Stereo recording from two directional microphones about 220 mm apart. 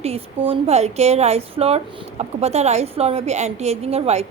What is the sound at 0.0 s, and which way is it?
A woman's voice, 25° right (ahead or behind).